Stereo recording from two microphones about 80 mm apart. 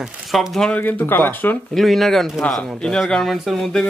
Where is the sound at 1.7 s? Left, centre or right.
Centre.